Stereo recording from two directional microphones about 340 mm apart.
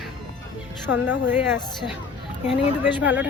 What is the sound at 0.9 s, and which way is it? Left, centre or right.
Speech, left.